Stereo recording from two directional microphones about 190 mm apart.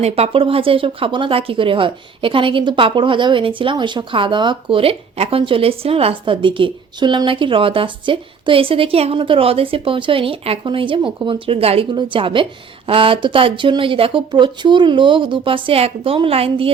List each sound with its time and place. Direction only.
0.0 s speech: 30° right (ahead or behind)